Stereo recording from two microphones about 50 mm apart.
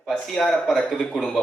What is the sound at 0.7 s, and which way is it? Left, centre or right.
Speech, centre.